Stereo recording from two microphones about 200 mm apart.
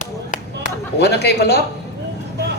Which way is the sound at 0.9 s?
55° left (ahead or behind).